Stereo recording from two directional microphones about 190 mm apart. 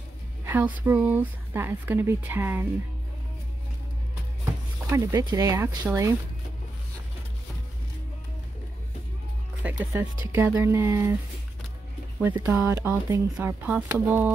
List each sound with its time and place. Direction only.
0.5 s speech: 10° right (ahead or behind)
4.9 s speech: 20° right (ahead or behind)
9.6 s speech: 10° right (ahead or behind)
12.2 s speech: 10° right (ahead or behind)